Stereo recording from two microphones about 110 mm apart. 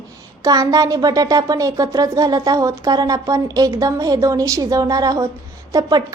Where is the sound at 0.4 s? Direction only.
35° right (ahead or behind).